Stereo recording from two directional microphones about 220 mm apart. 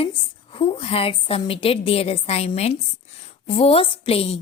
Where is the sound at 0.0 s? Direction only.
25° left (ahead or behind).